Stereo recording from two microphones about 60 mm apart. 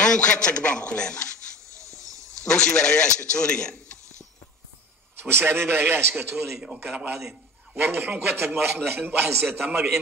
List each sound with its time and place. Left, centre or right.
0.0 s a man's voice: centre
1.8 s a sound: right
2.4 s a man's voice: centre
5.2 s a man's voice: right
6.3 s a man's voice: centre
7.8 s a man's voice: right